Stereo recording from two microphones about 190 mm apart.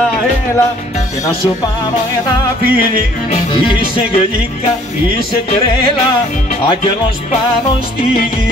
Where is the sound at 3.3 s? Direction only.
30° left (ahead or behind).